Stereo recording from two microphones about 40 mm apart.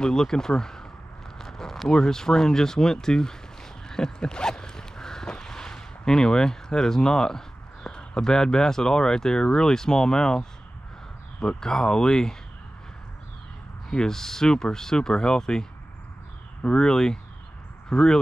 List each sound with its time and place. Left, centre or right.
0.0 s speech: centre
3.9 s a sound: centre
11.3 s speech: left
13.8 s speech: centre
16.7 s speech: centre